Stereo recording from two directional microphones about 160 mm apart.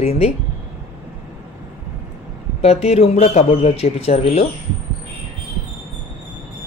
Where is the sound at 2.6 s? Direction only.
40° left (ahead or behind).